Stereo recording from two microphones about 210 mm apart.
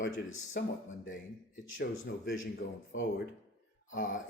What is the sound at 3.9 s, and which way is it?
Speech, 40° left (ahead or behind).